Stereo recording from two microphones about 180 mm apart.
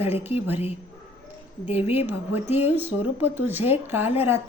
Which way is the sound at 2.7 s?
10° right (ahead or behind).